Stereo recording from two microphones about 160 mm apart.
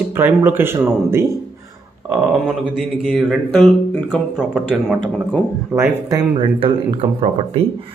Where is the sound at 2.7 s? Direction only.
Centre (ahead or behind).